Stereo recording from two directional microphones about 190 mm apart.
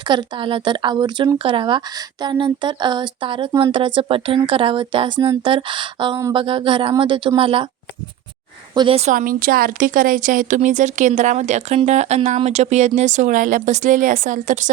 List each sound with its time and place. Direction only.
0.1 s speech: 25° right (ahead or behind)
8.7 s a woman's voice: 25° right (ahead or behind); by 14.7 s 40° right (ahead or behind)